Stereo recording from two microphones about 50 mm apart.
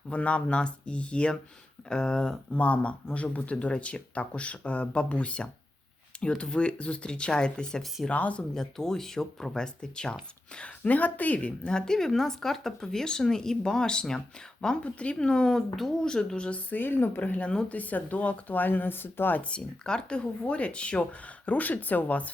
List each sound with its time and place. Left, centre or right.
0.1 s speech: left
2.5 s speech: left; by 7.9 s centre
8.1 s speech: left
8.5 s speech: centre
10.6 s speech: left
11.3 s speech: left
11.9 s speech: centre
16.6 s speech: left
19.4 s speech: left